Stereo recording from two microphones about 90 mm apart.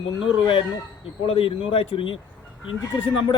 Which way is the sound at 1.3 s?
90° left.